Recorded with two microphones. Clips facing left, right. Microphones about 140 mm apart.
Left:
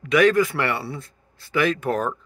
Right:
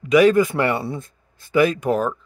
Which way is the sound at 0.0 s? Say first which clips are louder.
Right 3 dB; 20° right (ahead or behind).